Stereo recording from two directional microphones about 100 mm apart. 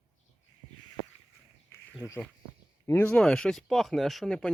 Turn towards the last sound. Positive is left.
turn(degrees=5)  # may be behind; listen again after turning